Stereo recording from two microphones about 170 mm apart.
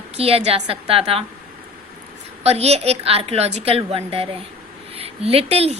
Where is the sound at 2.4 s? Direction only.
40° right (ahead or behind).